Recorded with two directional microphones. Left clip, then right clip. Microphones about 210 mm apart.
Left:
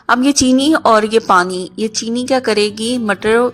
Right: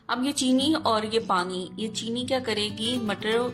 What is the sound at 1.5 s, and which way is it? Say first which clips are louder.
Speech: left 11 dB; 90° left.